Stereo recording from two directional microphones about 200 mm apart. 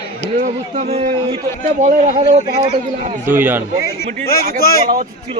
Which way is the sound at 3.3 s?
10° right (ahead or behind).